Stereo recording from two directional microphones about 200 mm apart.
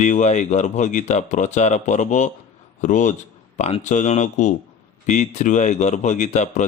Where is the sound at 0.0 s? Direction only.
35° left (ahead or behind).